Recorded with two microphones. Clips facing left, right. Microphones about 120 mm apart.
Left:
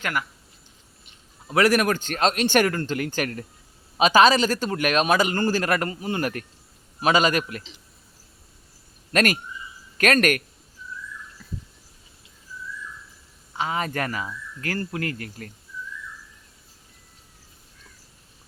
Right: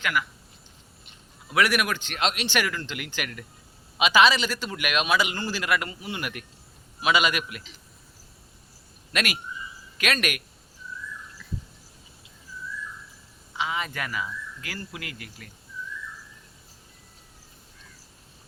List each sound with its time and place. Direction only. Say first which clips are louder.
0.0 s a man's voice: even; 45° left (ahead or behind)
1.5 s a man's voice: left 5 dB; 40° left (ahead or behind)
9.1 s a man's voice: left 7 dB; 45° left (ahead or behind)
11.4 s a sound: right 1 dB; 40° left (ahead or behind)
13.6 s a man's voice: left 4 dB; 45° left (ahead or behind)